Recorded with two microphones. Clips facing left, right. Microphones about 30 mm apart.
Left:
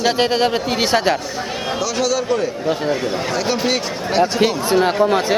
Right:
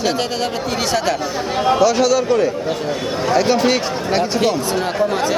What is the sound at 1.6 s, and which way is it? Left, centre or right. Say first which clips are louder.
A man's voice: right 7 dB; centre.